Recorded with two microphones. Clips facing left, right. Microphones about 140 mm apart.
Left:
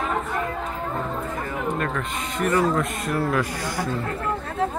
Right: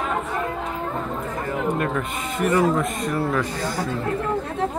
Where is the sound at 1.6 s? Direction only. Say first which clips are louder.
Right 3 dB; 10° right (ahead or behind); by 3.8 s 15° left (ahead or behind).